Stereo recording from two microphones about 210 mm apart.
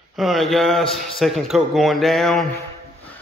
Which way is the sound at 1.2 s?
Centre (ahead or behind).